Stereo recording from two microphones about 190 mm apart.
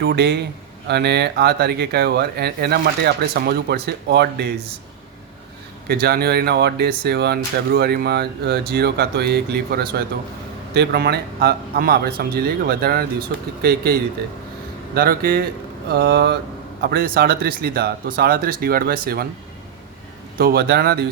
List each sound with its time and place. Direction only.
0.0 s speech: 60° right (ahead or behind)
5.9 s speech: 55° right (ahead or behind)
20.4 s speech: 55° right (ahead or behind)